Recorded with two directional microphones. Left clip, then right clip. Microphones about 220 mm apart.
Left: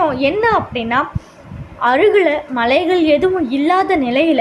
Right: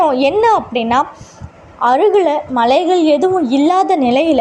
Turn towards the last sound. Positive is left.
turn(degrees=-15)  # may be behind; listen again after turning